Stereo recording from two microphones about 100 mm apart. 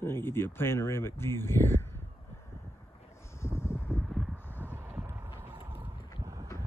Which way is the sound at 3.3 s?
25° left (ahead or behind).